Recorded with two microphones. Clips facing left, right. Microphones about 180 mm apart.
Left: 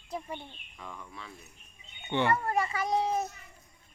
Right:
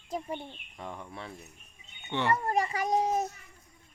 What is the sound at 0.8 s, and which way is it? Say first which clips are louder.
Cricket: right 4 dB; 30° right (ahead or behind).